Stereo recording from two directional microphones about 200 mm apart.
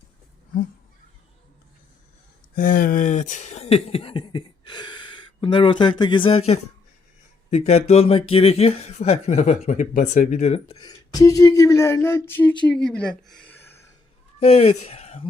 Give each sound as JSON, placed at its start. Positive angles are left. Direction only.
{"t": 2.6, "sound": "speech", "side_deg": 45}
{"t": 10.8, "sound": "speech", "side_deg": 20}
{"t": 14.3, "sound": "speech", "side_deg": 30}